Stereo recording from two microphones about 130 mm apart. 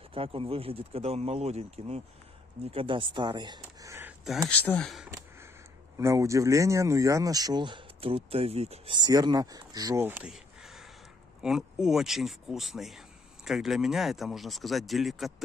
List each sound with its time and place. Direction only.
0.1 s speech: 45° right (ahead or behind)
2.7 s speech: 45° right (ahead or behind)
4.5 s speech: 10° left (ahead or behind)
5.9 s speech: 25° right (ahead or behind); by 8.9 s 50° right (ahead or behind)
8.9 s speech: 30° right (ahead or behind)
10.0 s speech: 15° right (ahead or behind)
10.3 s a sound: centre (ahead or behind)
11.4 s speech: 5° right (ahead or behind)